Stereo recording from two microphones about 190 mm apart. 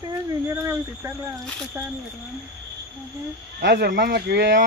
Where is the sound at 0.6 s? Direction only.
15° right (ahead or behind).